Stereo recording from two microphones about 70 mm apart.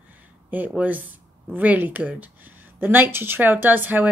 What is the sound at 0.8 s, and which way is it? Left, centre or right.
Speech, right.